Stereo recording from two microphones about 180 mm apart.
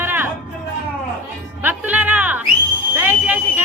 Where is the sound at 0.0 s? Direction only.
10° right (ahead or behind).